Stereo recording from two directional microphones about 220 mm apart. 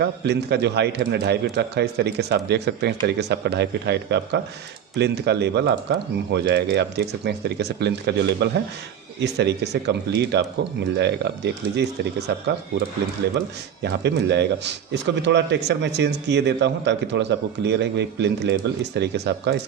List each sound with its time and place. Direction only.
0.3 s a man's voice: 50° right (ahead or behind)
13.8 s a man's voice: 50° right (ahead or behind)